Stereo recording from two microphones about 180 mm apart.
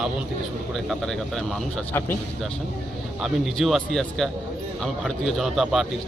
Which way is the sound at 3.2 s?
Centre (ahead or behind).